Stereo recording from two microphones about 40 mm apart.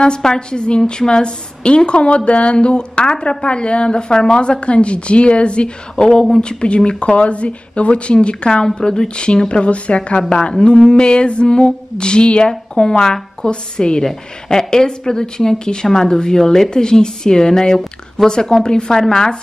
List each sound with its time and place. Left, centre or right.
0.0 s a woman's voice: left